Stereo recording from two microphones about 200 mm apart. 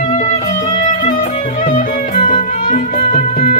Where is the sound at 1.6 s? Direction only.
40° left (ahead or behind).